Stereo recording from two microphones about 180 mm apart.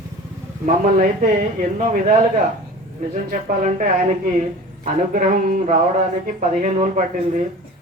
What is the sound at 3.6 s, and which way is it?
Speech, 45° right (ahead or behind).